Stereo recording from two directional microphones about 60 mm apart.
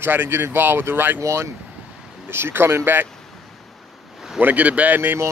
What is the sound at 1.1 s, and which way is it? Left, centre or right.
Speech, right.